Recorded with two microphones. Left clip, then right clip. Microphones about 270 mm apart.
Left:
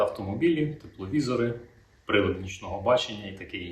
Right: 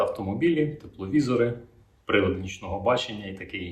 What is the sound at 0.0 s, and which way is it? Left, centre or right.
Speech, centre.